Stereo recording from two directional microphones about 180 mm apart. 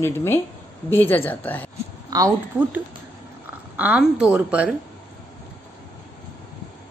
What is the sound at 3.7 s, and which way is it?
Speech, 10° right (ahead or behind).